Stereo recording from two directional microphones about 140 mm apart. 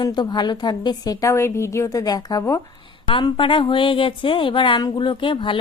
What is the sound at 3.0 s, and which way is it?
A woman's voice, 40° left (ahead or behind).